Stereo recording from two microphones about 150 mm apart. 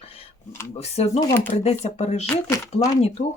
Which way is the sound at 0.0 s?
40° left (ahead or behind).